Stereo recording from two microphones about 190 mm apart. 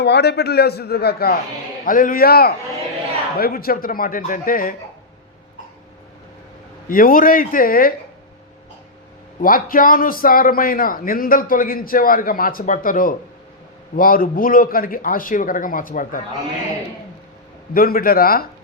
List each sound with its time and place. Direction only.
0.0 s a man's voice: 60° left (ahead or behind)
6.8 s a man's voice: 45° left (ahead or behind)
9.4 s a man's voice: 50° left (ahead or behind)
17.7 s a man's voice: 50° left (ahead or behind)